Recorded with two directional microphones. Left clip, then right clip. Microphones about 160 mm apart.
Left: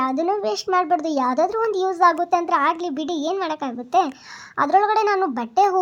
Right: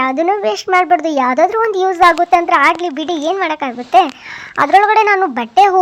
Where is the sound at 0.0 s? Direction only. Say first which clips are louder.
Right 7 dB; 15° right (ahead or behind).